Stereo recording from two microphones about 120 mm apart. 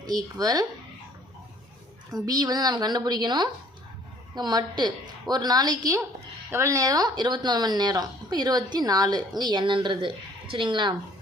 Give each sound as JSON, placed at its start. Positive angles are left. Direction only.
{"t": 0.3, "sound": "speech", "side_deg": -30}
{"t": 2.1, "sound": "speech", "side_deg": -30}